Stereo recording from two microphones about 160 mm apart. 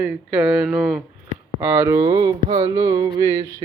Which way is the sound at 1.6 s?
15° right (ahead or behind).